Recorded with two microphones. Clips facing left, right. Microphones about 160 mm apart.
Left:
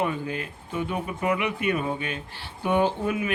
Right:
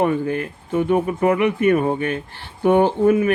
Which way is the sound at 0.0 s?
55° right (ahead or behind).